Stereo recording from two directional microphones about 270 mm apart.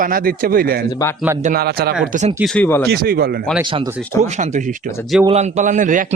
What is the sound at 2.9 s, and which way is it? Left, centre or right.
A man's voice, right.